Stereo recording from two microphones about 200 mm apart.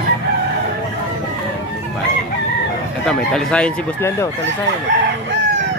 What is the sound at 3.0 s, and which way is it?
Speech, 5° left (ahead or behind).